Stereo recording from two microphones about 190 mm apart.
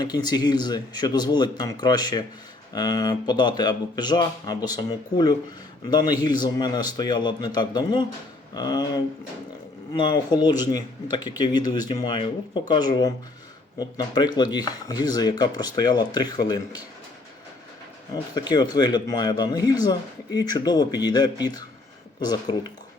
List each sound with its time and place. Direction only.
0.0 s a man's voice: 20° left (ahead or behind)
9.9 s a man's voice: 25° left (ahead or behind)
18.1 s a man's voice: 20° left (ahead or behind)